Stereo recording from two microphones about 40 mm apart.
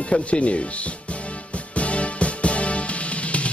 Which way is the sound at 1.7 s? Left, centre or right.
Left.